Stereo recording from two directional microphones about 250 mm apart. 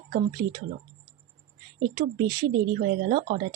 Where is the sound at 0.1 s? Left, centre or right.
Right.